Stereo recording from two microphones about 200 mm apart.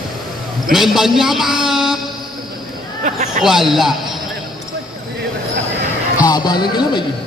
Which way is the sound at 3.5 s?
Centre (ahead or behind).